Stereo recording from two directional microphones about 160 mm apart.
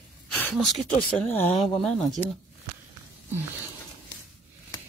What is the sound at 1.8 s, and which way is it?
Speech, centre (ahead or behind).